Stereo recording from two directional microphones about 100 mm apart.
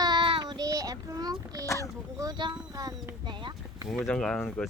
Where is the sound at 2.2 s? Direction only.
40° right (ahead or behind).